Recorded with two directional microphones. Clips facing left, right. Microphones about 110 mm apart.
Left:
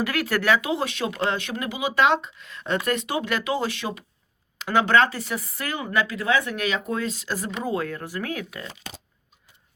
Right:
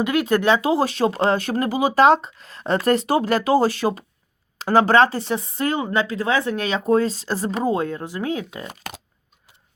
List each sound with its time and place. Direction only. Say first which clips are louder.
0.0 s speech: right 5 dB; 20° right (ahead or behind)
8.6 s speech: right 4 dB; 60° right (ahead or behind)